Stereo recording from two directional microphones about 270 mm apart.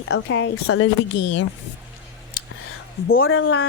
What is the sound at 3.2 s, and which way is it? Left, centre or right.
Speech, left.